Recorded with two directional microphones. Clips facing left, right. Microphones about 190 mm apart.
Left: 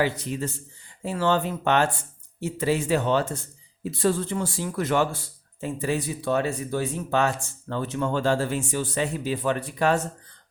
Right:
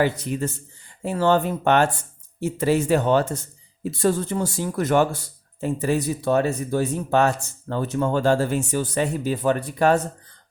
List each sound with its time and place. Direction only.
0.0 s speech: 50° right (ahead or behind)